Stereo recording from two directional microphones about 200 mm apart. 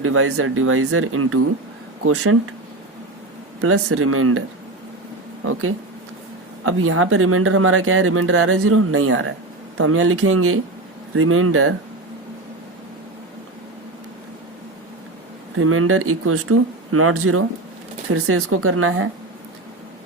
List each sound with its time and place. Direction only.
0.0 s speech: 90° right
3.6 s speech: 90° right
5.5 s speech: 90° right
15.5 s speech: 90° right